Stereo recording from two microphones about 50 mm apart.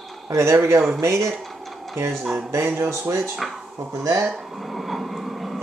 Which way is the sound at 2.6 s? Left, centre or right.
Right.